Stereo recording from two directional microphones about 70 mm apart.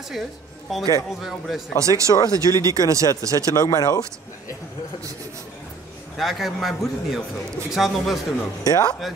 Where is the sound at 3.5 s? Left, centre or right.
Left.